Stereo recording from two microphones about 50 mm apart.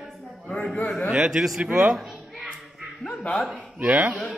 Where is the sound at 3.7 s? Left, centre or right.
Right.